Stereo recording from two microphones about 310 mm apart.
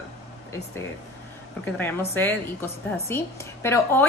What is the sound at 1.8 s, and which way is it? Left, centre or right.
A woman's voice, centre.